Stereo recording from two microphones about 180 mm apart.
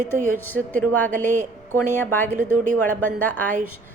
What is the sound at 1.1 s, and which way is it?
Speech, 45° right (ahead or behind).